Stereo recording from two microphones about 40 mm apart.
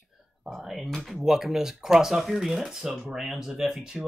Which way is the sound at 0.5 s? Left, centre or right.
Centre.